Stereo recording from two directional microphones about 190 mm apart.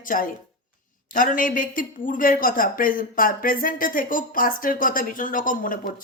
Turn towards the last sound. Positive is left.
turn(degrees=45)  # may be behind; listen again after turning